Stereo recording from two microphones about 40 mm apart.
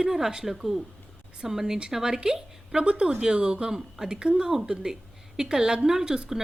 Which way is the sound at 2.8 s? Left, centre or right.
Right.